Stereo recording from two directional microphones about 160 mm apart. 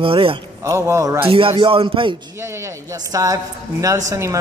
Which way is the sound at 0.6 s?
20° right (ahead or behind).